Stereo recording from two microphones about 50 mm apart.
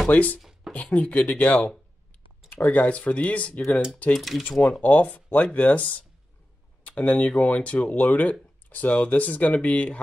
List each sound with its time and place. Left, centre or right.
0.1 s speech: left
0.4 s a sound: centre
0.7 s speech: left
4.1 s speech: centre
4.5 s speech: left